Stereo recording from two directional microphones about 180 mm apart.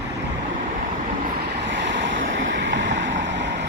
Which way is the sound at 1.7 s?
85° right.